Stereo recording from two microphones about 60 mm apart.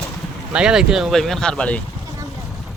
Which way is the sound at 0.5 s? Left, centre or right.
Centre.